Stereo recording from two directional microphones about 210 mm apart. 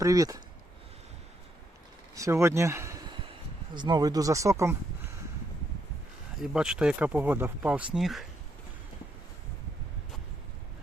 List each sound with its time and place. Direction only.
0.0 s speech: 15° right (ahead or behind)
2.1 s speech: 15° right (ahead or behind)
6.4 s speech: 5° right (ahead or behind)